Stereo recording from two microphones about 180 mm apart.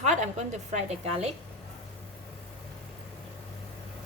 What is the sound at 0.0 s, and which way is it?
A woman's voice, 40° right (ahead or behind).